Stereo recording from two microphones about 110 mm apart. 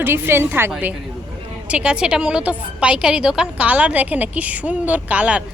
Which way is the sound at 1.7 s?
10° right (ahead or behind).